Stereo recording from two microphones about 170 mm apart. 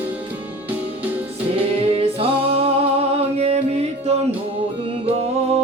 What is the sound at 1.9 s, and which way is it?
Music, 35° right (ahead or behind).